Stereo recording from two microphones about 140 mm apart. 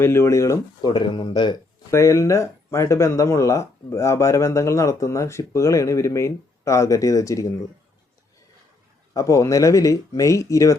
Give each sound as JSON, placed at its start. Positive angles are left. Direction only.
{"t": 0.0, "sound": "speech", "side_deg": 20}
{"t": 1.9, "sound": "speech", "side_deg": 20}
{"t": 9.1, "sound": "speech", "side_deg": 20}